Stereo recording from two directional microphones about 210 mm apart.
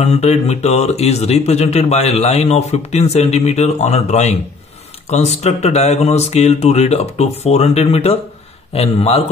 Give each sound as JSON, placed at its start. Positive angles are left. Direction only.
{"t": 0.0, "sound": "a man's voice", "side_deg": 30}